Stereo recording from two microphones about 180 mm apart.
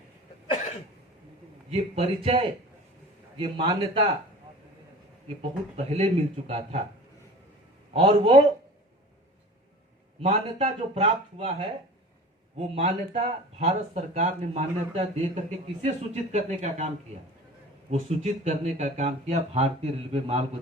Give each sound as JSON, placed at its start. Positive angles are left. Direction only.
{"t": 1.7, "sound": "speech", "side_deg": -30}
{"t": 5.4, "sound": "speech", "side_deg": -35}
{"t": 7.9, "sound": "speech", "side_deg": -30}
{"t": 10.2, "sound": "speech", "side_deg": -35}
{"t": 12.5, "sound": "speech", "side_deg": -35}
{"t": 18.2, "sound": "speech", "side_deg": -40}